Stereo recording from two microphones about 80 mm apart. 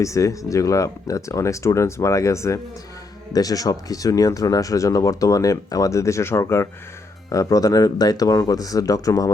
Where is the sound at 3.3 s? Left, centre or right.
Left.